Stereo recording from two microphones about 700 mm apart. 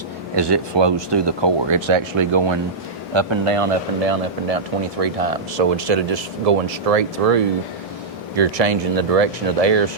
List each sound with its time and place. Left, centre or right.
0.3 s speech: right